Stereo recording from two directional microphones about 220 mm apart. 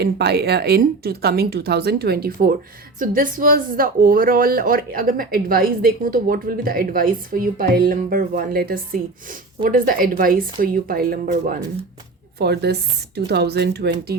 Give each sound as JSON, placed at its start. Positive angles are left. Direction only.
{"t": 0.0, "sound": "speech", "side_deg": -45}